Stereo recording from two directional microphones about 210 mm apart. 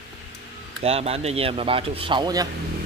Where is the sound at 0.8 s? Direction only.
30° right (ahead or behind).